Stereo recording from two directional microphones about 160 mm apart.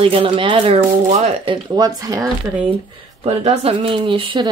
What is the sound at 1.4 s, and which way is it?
Speech, 25° right (ahead or behind).